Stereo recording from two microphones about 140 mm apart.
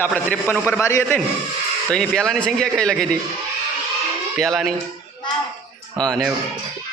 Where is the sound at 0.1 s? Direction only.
10° left (ahead or behind).